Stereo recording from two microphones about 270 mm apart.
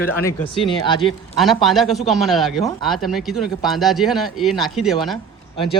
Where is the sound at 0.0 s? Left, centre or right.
Centre.